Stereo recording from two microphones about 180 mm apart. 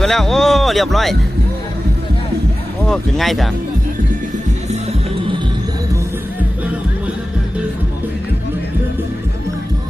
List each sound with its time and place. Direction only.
0.0 s speech: centre (ahead or behind)
2.8 s speech: centre (ahead or behind)
4.7 s music: 35° right (ahead or behind)